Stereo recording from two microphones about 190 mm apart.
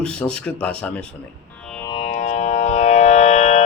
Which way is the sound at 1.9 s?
35° left (ahead or behind).